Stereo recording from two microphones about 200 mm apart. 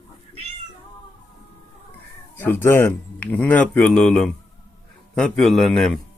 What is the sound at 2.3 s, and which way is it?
A man's voice, 10° left (ahead or behind).